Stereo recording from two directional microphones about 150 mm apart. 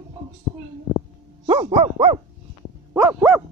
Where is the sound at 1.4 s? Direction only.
45° right (ahead or behind).